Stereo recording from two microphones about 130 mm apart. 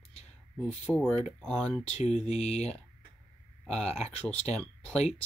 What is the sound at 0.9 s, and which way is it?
Speech, 5° left (ahead or behind).